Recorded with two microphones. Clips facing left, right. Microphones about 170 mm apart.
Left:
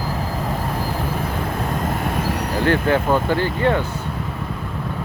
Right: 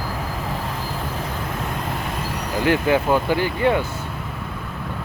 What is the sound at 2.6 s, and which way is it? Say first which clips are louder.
Speech: even; 10° right (ahead or behind).